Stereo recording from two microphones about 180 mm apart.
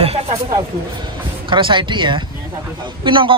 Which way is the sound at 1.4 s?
25° right (ahead or behind).